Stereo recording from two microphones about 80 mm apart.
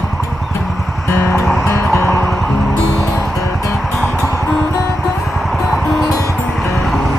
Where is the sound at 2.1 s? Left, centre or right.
Centre.